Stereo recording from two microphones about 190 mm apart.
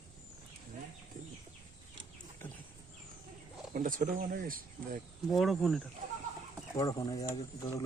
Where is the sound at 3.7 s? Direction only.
45° right (ahead or behind).